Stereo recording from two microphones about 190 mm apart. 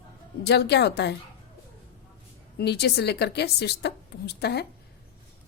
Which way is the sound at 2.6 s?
60° left (ahead or behind).